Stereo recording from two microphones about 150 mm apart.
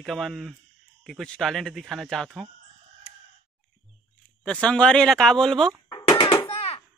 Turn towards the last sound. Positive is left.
turn(degrees=40)  # may be behind; listen again after turning